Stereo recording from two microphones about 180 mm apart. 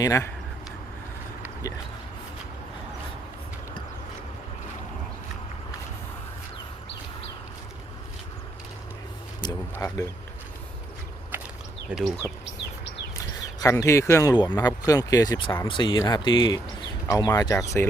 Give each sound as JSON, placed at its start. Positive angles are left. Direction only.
{"t": 0.0, "sound": "speech", "side_deg": 15}
{"t": 9.7, "sound": "speech", "side_deg": 15}
{"t": 11.9, "sound": "speech", "side_deg": -5}
{"t": 13.1, "sound": "speech", "side_deg": 20}